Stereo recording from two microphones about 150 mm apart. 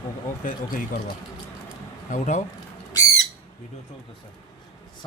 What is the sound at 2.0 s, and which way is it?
Speech, 55° left (ahead or behind).